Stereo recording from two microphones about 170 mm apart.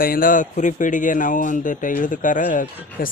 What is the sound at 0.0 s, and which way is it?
A man's voice, 55° left (ahead or behind).